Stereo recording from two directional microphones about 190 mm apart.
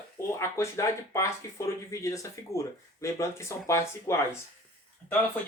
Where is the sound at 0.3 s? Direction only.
15° left (ahead or behind).